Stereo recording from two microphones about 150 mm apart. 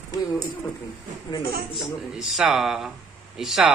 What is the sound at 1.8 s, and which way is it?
Speech, 5° right (ahead or behind).